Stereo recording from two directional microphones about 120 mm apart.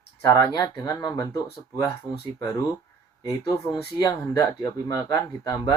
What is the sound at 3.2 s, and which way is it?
Speech, 30° left (ahead or behind).